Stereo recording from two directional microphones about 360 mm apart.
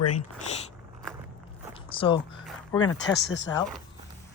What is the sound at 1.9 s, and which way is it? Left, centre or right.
Speech, centre.